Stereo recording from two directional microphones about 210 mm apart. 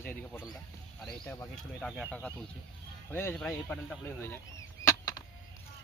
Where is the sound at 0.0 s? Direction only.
10° left (ahead or behind).